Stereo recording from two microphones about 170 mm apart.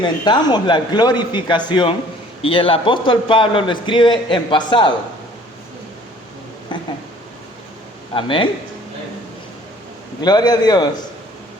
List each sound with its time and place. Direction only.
0.0 s a man's voice: 25° left (ahead or behind)
8.1 s a man's voice: 30° left (ahead or behind)
10.2 s a man's voice: 25° left (ahead or behind)